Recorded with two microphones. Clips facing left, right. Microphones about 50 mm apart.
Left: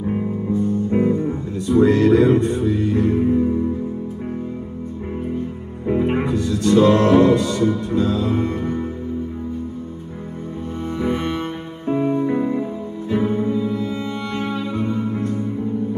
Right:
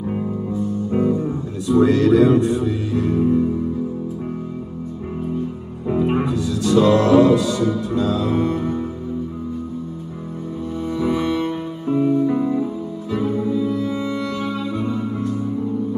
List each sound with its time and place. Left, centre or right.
0.5 s music: left
5.9 s music: left
11.0 s music: left